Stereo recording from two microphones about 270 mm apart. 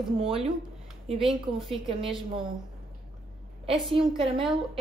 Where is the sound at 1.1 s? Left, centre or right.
Centre.